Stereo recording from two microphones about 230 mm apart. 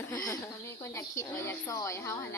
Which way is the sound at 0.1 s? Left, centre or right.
Centre.